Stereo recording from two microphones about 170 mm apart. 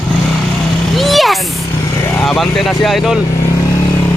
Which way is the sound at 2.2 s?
Centre (ahead or behind).